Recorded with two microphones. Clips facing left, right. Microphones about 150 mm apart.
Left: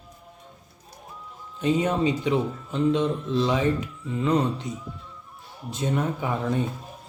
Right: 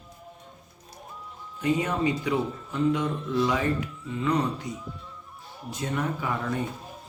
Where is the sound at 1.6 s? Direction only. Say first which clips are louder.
Left 3 dB; 20° left (ahead or behind).